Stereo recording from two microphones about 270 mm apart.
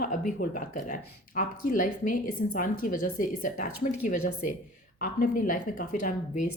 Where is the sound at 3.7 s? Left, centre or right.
Left.